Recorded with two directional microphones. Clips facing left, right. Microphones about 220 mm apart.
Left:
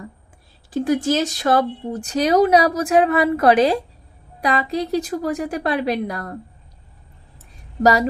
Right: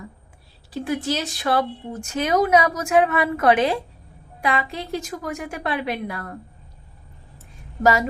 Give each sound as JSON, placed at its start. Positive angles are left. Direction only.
{"t": 0.7, "sound": "speech", "side_deg": 45}
{"t": 7.8, "sound": "speech", "side_deg": 35}